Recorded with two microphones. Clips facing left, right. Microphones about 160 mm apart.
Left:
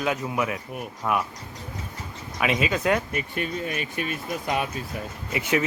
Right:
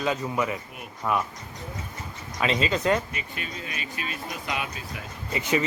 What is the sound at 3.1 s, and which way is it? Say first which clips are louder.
Speech: left 7 dB; 50° left (ahead or behind).